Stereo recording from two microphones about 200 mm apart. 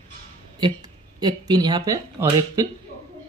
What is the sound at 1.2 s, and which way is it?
Speech, 20° right (ahead or behind).